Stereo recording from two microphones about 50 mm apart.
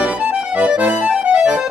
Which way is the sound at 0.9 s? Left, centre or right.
Right.